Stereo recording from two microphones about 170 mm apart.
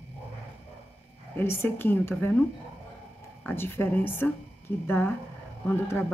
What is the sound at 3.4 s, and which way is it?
A woman's voice, 15° left (ahead or behind).